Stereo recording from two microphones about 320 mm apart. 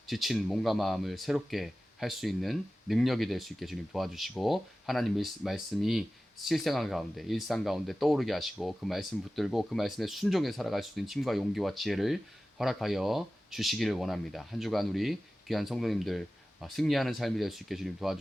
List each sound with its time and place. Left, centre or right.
0.1 s speech: centre